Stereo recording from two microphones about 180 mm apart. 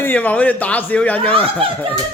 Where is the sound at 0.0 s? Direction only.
10° left (ahead or behind).